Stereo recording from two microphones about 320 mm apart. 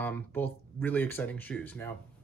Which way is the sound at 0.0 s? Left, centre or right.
Centre.